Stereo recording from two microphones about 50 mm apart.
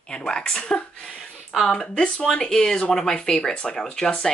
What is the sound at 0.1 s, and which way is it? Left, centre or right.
Speech, centre.